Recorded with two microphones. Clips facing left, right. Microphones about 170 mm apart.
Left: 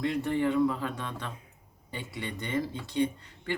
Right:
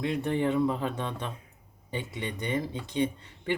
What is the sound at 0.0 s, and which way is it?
Speech, 20° right (ahead or behind).